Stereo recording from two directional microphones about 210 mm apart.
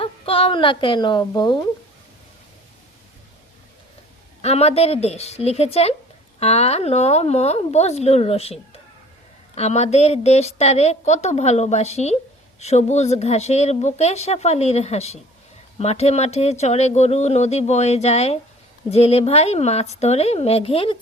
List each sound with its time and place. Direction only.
0.0 s a woman's voice: 25° left (ahead or behind)
4.4 s a woman's voice: 30° left (ahead or behind)